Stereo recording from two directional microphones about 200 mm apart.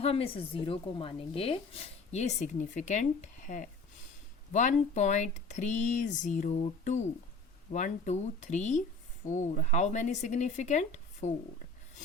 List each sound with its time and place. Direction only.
0.0 s a woman's voice: 30° left (ahead or behind)